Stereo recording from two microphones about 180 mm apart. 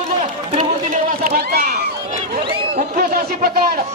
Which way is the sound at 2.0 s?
40° right (ahead or behind).